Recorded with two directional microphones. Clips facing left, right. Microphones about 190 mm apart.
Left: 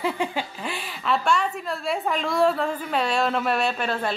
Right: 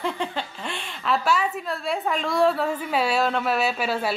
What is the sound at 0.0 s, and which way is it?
A woman's voice, 5° left (ahead or behind).